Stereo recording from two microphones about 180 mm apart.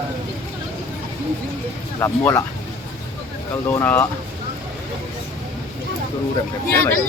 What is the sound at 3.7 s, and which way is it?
Speech, 10° left (ahead or behind).